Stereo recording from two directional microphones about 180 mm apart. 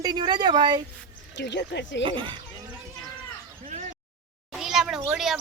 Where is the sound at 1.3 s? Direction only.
70° left (ahead or behind).